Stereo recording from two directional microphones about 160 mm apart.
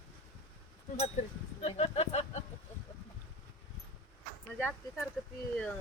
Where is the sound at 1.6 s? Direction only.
40° left (ahead or behind).